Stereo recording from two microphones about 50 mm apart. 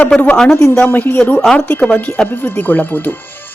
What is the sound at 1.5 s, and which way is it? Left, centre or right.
Speech, left.